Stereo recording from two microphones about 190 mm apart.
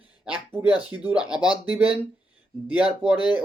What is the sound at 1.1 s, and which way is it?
Speech, 5° right (ahead or behind).